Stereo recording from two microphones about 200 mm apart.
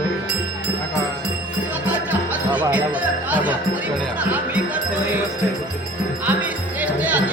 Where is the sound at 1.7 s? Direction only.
10° right (ahead or behind).